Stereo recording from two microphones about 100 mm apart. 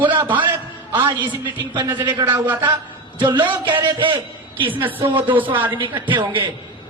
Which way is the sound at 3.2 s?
50° right (ahead or behind).